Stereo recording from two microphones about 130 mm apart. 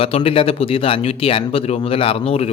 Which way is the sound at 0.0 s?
50° left (ahead or behind).